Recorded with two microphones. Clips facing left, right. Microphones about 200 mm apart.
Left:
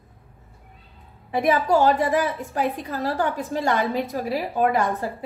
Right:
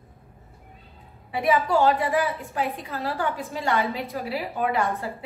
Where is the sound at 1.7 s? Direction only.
45° left (ahead or behind).